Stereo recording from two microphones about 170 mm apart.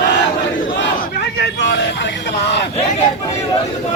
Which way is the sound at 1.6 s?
85° left.